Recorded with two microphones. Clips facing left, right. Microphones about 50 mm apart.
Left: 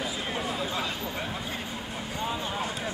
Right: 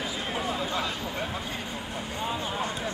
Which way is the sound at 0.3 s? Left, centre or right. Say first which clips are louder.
Right 3 dB; centre.